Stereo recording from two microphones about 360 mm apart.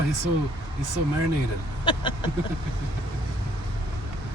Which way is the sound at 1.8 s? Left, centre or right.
Centre.